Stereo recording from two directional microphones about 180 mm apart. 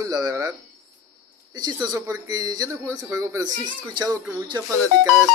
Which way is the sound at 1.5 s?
25° right (ahead or behind).